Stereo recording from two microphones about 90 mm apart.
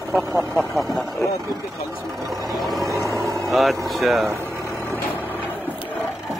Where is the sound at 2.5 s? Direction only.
Centre (ahead or behind).